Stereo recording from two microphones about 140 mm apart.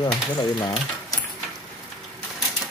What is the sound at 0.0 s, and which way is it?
Speech, 30° left (ahead or behind).